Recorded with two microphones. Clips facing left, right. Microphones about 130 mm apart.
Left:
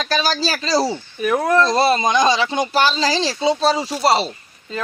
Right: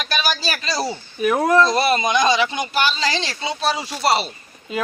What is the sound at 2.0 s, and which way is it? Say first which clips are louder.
Speech: left 1 dB; 30° left (ahead or behind).